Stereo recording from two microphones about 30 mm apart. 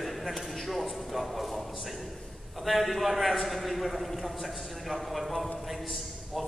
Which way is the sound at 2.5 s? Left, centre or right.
Centre.